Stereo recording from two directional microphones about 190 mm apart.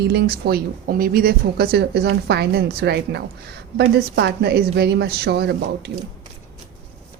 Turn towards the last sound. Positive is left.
turn(degrees=-60)  # may be behind; listen again after turning